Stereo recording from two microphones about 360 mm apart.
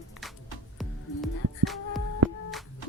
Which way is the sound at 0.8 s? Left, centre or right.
Centre.